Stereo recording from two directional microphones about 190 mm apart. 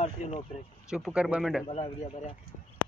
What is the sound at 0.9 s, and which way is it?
Speech, 5° right (ahead or behind).